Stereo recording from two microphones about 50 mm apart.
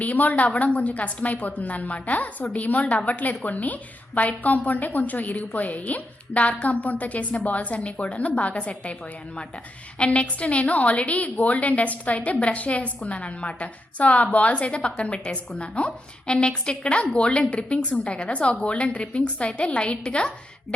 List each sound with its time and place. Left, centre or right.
0.0 s a woman's voice: left
10.0 s a woman's voice: left